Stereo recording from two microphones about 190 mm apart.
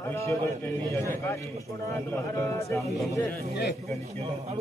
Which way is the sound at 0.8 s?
15° right (ahead or behind).